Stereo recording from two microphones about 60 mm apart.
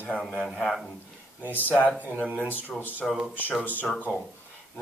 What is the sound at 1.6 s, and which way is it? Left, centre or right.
Speech, left.